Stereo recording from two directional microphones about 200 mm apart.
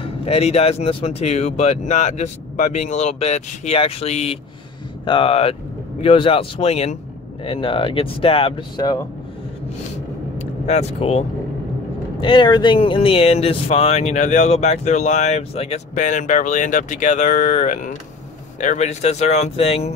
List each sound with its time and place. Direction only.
0.0 s speech: 30° left (ahead or behind)
10.4 s speech: 35° left (ahead or behind)